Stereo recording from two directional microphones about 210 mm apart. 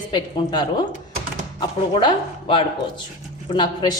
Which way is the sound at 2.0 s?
25° left (ahead or behind).